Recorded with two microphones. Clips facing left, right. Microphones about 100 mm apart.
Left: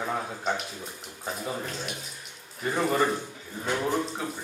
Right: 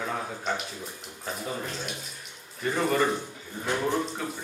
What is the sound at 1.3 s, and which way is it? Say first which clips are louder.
Speech: even; centre (ahead or behind).